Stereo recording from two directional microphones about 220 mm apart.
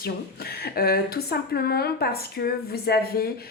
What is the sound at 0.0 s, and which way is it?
A woman's voice, 45° left (ahead or behind).